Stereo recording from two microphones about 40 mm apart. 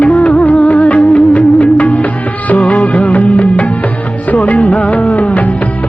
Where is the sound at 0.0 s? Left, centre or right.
Left.